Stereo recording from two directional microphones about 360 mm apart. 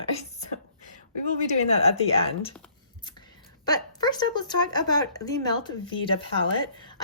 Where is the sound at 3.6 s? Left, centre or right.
Centre.